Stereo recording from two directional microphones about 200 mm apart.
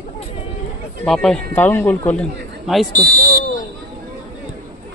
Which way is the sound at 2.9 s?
45° right (ahead or behind).